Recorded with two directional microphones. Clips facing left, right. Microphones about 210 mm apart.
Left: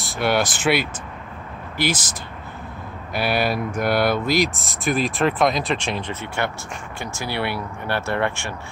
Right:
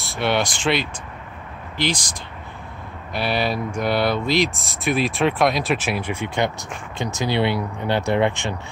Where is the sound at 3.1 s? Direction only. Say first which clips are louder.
Left 1 dB; 5° left (ahead or behind).